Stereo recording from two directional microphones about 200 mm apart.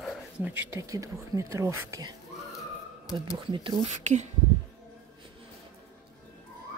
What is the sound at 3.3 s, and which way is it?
Speech, 25° right (ahead or behind).